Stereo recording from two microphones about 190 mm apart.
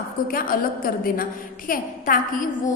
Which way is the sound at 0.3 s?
50° left (ahead or behind).